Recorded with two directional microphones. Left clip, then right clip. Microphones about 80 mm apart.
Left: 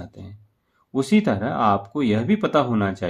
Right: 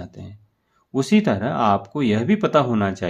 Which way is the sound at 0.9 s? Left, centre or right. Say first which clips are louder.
Right 1 dB; centre.